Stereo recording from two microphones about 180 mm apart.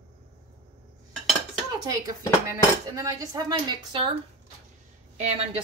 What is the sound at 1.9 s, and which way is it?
Dishes, 20° right (ahead or behind).